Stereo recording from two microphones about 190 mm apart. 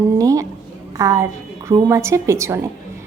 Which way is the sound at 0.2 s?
15° right (ahead or behind).